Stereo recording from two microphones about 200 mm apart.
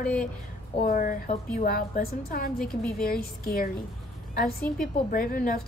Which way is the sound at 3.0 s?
50° left (ahead or behind).